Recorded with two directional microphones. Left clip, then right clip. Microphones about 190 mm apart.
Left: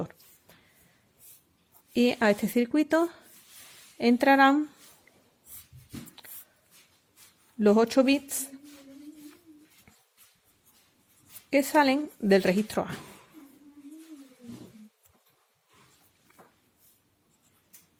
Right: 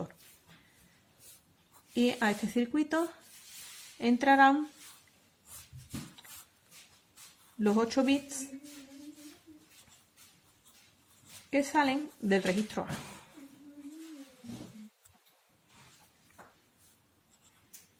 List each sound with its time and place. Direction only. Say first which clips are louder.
2.0 s speech: left 6 dB; 45° left (ahead or behind)
7.6 s speech: left 7 dB; 50° left (ahead or behind)
11.5 s speech: left 6 dB; 50° left (ahead or behind)